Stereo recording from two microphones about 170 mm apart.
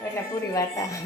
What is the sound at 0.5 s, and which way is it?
Speech, 20° left (ahead or behind).